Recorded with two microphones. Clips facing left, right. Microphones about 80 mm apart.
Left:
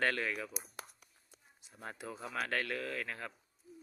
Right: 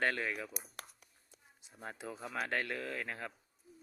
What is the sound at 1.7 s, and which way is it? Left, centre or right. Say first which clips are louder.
Speech: even; centre.